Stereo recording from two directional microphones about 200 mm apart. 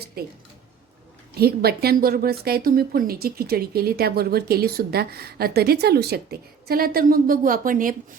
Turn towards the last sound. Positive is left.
turn(degrees=-45)  # may be behind; listen again after turning